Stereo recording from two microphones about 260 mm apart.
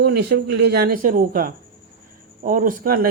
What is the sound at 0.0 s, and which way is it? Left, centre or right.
Speech, right.